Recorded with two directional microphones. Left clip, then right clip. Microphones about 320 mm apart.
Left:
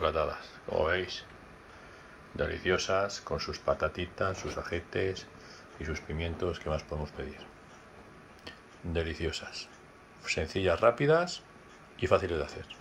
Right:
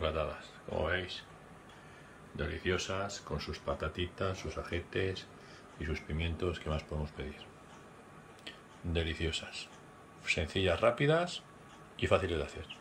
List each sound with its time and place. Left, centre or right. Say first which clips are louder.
0.0 s speech: left 5 dB; centre
2.3 s speech: left 5 dB; centre
8.5 s speech: left 2 dB; centre